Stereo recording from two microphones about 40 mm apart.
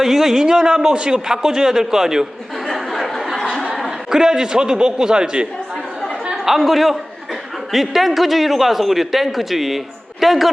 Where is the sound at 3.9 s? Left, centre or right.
Centre.